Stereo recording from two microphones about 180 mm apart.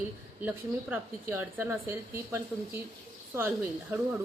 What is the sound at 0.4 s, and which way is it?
A woman's voice, 10° right (ahead or behind).